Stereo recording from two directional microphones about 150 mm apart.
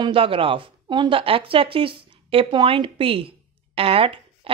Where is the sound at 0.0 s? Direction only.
35° right (ahead or behind).